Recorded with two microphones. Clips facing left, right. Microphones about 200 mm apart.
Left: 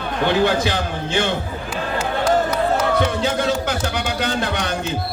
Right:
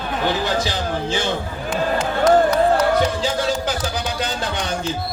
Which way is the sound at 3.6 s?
60° left (ahead or behind).